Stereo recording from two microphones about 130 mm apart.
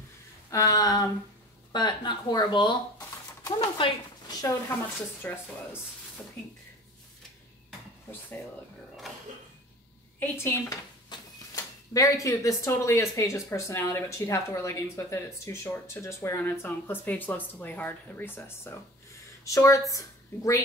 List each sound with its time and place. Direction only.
0.5 s speech: 25° left (ahead or behind)
4.4 s a woman's voice: 25° left (ahead or behind)
10.1 s a woman's voice: 20° left (ahead or behind)